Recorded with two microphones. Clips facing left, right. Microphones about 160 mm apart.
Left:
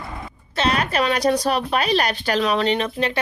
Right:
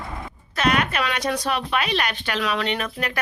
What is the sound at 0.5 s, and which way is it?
Speech, 30° left (ahead or behind).